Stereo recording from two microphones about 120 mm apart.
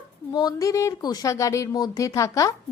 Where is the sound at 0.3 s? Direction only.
30° left (ahead or behind).